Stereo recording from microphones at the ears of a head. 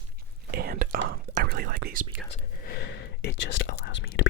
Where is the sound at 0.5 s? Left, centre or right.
Right.